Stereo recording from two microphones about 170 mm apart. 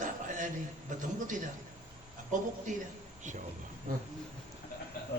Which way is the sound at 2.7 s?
45° right (ahead or behind).